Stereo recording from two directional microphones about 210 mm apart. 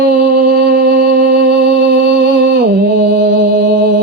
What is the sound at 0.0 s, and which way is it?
Music, 45° right (ahead or behind).